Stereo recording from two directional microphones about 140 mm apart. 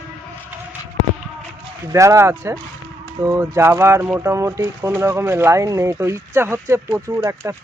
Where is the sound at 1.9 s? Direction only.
20° right (ahead or behind).